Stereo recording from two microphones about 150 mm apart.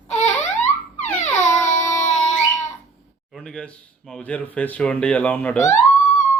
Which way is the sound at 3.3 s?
Centre (ahead or behind).